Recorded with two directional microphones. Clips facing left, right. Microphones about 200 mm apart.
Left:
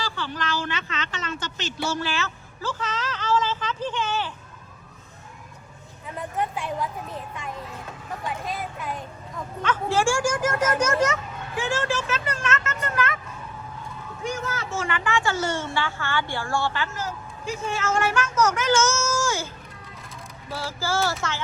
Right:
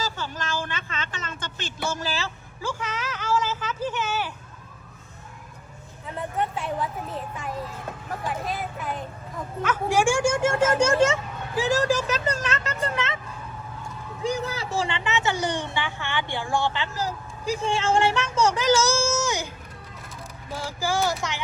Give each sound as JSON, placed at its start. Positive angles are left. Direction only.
{"t": 0.0, "sound": "a sound", "side_deg": -45}
{"t": 1.3, "sound": "speech", "side_deg": -50}
{"t": 2.6, "sound": "speech", "side_deg": -10}
{"t": 6.3, "sound": "a woman's voice", "side_deg": 0}
{"t": 8.3, "sound": "a woman's voice", "side_deg": 0}
{"t": 14.3, "sound": "speech", "side_deg": -35}
{"t": 16.9, "sound": "speech", "side_deg": -35}
{"t": 20.5, "sound": "speech", "side_deg": -15}